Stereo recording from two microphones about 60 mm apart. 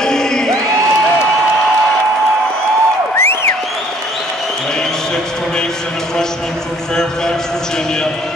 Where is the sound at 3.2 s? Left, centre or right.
Left.